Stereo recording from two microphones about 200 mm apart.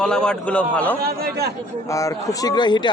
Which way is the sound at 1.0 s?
50° right (ahead or behind).